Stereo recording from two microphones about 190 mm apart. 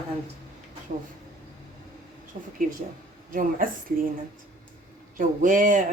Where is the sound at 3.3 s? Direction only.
45° right (ahead or behind).